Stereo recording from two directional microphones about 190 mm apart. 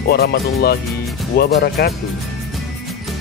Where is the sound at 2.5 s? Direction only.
Centre (ahead or behind).